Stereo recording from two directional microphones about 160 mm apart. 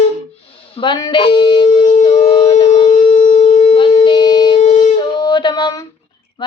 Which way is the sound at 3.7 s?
35° left (ahead or behind).